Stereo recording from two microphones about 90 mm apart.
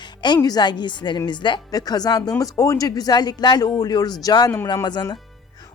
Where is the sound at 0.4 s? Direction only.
50° left (ahead or behind).